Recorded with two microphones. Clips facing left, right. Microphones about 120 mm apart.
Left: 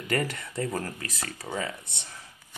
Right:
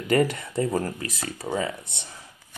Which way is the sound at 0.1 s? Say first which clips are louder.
Right 7 dB; 20° right (ahead or behind).